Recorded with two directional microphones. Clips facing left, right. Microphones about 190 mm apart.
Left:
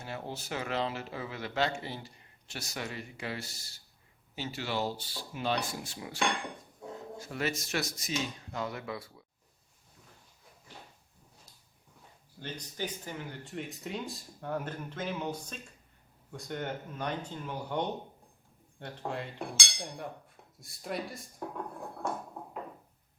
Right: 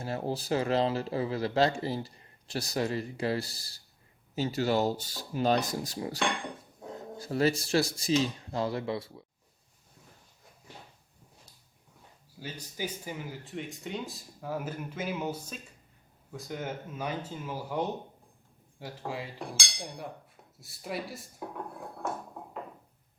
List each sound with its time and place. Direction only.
0.0 s speech: 35° right (ahead or behind)
7.2 s speech: 35° right (ahead or behind)
12.4 s speech: 5° right (ahead or behind)